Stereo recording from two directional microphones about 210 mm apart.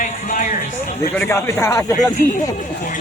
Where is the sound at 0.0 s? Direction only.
40° left (ahead or behind).